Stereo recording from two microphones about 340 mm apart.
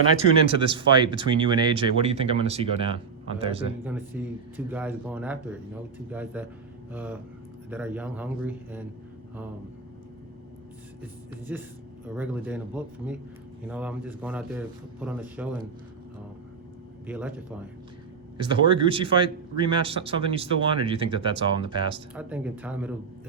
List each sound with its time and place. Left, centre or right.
0.4 s speech: centre
3.8 s a man's voice: centre
11.0 s a man's voice: centre
17.1 s a man's voice: centre
22.1 s a man's voice: centre